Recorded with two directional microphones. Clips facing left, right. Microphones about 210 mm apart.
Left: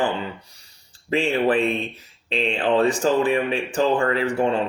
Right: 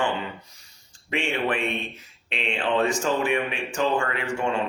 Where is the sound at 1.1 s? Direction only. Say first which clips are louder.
Left 6 dB; 35° left (ahead or behind).